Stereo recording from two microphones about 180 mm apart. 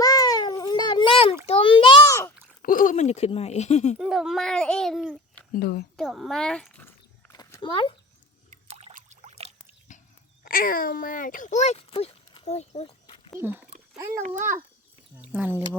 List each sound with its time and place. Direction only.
0.0 s cat: 20° left (ahead or behind)
1.5 s a sound: 30° left (ahead or behind)
2.6 s speech: 50° left (ahead or behind)
3.9 s a child's voice: 5° right (ahead or behind)
5.5 s speech: 60° left (ahead or behind)
6.0 s a child's voice: centre (ahead or behind)
7.3 s a sound: 25° left (ahead or behind)
8.4 s trickle: 35° right (ahead or behind)
9.9 s a sound: 45° left (ahead or behind)
10.4 s a child's voice: 55° left (ahead or behind); by 13.3 s 30° left (ahead or behind)
14.2 s speech: 45° right (ahead or behind)
15.2 s speech: 10° right (ahead or behind)